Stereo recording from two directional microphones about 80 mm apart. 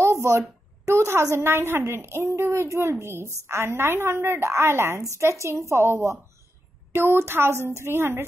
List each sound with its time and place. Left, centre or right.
0.0 s a woman's voice: right